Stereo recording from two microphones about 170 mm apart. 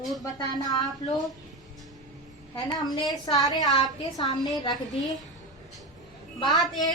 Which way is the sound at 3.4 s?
25° left (ahead or behind).